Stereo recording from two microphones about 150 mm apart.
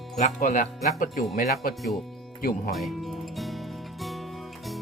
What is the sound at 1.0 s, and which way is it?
Speech, 75° left (ahead or behind).